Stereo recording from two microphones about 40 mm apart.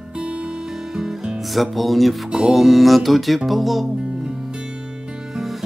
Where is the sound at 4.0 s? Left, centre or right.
Right.